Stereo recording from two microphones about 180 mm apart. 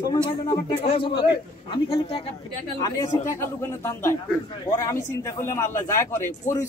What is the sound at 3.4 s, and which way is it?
A man's voice, 15° left (ahead or behind).